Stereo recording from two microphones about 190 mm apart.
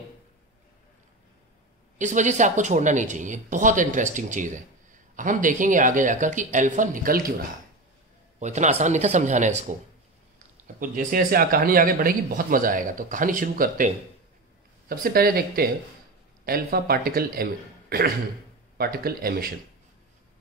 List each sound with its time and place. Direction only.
2.0 s speech: 40° right (ahead or behind)
8.4 s speech: 40° right (ahead or behind)
10.8 s speech: 45° right (ahead or behind)